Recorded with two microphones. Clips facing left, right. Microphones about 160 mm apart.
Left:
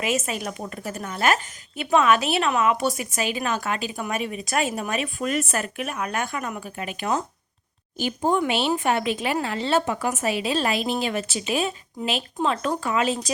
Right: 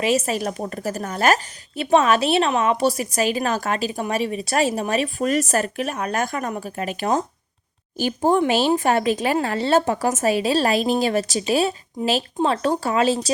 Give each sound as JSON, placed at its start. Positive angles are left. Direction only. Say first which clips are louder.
{"t": 0.0, "sound": "a woman's voice", "louder": "right 5 dB", "side_deg": -35}